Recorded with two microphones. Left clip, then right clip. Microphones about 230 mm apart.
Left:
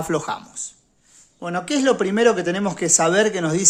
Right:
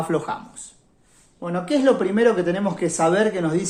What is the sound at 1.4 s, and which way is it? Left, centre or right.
Speech, left.